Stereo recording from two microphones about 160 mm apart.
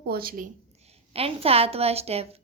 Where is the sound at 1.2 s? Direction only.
35° right (ahead or behind).